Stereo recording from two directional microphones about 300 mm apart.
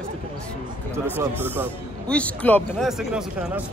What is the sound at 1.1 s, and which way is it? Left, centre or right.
A man's voice, centre.